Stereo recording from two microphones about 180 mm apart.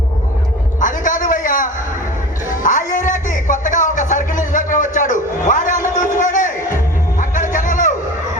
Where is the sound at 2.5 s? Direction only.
45° left (ahead or behind).